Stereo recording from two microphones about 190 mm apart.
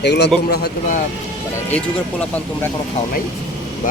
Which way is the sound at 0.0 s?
60° left (ahead or behind).